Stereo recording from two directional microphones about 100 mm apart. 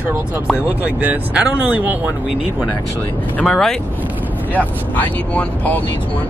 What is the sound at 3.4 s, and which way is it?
Speech, 5° left (ahead or behind).